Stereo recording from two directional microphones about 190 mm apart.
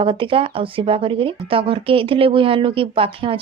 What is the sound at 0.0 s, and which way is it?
Speech, 25° right (ahead or behind).